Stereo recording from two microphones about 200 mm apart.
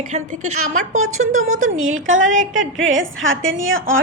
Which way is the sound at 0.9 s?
90° right.